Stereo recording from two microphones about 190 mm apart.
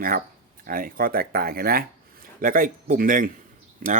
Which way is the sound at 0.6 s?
45° right (ahead or behind).